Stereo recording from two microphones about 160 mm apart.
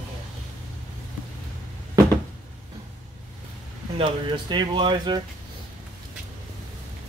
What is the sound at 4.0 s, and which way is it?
Speech, 30° right (ahead or behind).